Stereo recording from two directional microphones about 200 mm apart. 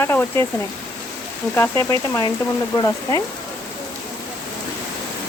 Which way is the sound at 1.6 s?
15° left (ahead or behind).